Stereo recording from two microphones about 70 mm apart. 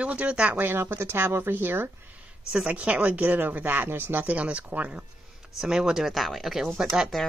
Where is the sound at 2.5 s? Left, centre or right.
Centre.